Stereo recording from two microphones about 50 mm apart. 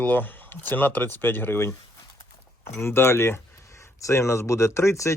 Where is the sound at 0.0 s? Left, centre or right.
Left.